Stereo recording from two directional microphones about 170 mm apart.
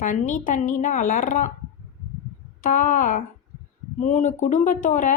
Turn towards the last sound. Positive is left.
turn(degrees=50)  # may be behind; listen again after turning